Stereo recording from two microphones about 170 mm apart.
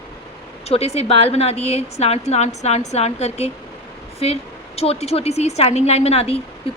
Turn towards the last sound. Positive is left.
turn(degrees=35)  # may be behind; listen again after turning